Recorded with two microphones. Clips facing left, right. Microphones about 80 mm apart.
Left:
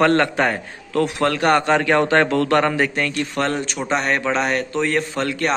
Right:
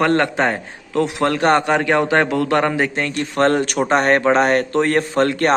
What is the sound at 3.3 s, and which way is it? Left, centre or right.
Speech, right.